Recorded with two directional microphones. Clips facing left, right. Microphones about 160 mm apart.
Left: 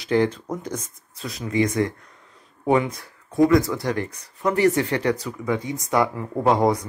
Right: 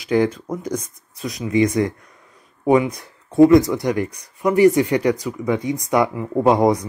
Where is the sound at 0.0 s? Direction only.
10° right (ahead or behind).